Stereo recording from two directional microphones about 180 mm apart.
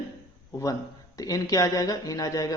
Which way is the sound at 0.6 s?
20° left (ahead or behind).